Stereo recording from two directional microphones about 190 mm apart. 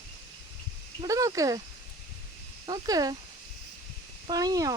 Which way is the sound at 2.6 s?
20° right (ahead or behind).